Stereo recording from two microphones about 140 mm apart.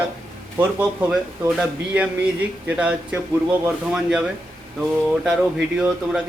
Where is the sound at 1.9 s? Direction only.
10° right (ahead or behind).